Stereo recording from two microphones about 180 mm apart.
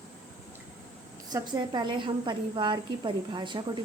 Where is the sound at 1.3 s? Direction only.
25° right (ahead or behind).